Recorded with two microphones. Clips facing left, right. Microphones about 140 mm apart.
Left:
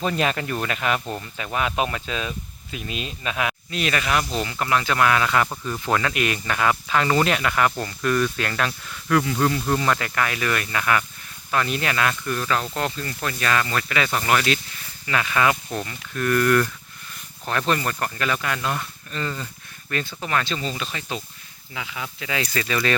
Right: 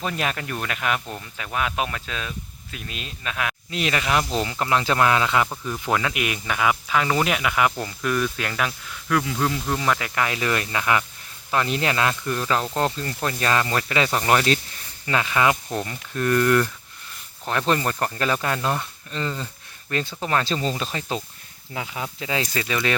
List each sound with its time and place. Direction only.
0.0 s speech: centre (ahead or behind)
3.7 s speech: 20° right (ahead or behind)
5.6 s speech: 10° right (ahead or behind)
10.2 s speech: 25° right (ahead or behind)
17.7 s speech: 30° right (ahead or behind)